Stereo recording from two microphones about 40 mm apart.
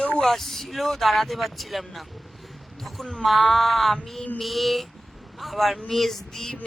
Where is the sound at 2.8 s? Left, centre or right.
Centre.